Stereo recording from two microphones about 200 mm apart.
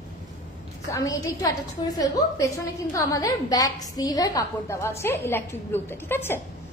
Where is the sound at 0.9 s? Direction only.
15° left (ahead or behind).